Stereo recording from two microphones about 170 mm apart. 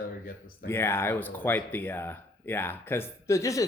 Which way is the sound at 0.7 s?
15° left (ahead or behind).